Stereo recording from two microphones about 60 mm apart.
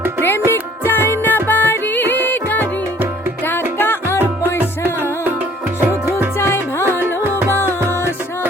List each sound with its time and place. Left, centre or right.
0.2 s music: left
3.8 s music: left
4.6 s music: right
6.3 s music: left